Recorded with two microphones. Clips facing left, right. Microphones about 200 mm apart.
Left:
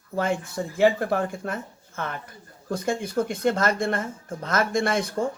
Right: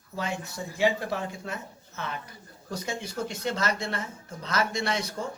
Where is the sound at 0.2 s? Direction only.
50° left (ahead or behind).